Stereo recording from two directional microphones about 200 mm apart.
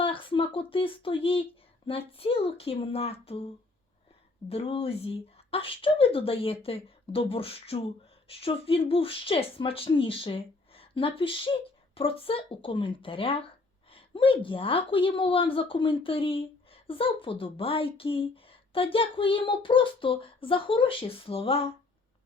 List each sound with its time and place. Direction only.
0.0 s speech: 25° left (ahead or behind)
4.4 s speech: 30° left (ahead or behind)